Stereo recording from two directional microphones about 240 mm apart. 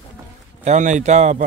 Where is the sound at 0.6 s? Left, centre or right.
Right.